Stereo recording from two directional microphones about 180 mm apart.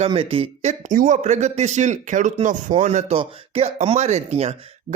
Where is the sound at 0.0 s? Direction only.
30° right (ahead or behind).